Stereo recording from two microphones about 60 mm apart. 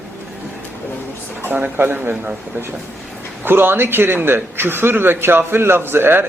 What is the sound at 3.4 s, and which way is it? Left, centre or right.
A man's voice, right.